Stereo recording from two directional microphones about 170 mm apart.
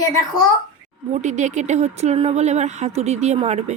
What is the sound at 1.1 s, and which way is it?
Speech, 45° right (ahead or behind).